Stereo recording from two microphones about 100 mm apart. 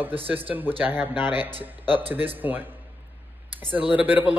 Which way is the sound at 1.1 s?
50° left (ahead or behind).